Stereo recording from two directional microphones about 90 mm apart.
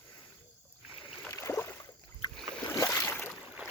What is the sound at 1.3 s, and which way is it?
Rowboat, 35° left (ahead or behind).